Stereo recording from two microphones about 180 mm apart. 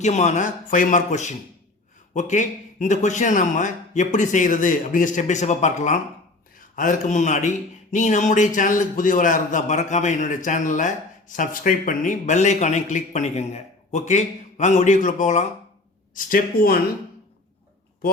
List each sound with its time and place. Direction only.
0.0 s speech: 40° left (ahead or behind)